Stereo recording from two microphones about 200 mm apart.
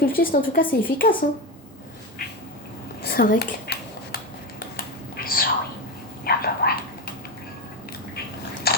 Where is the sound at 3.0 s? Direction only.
45° left (ahead or behind).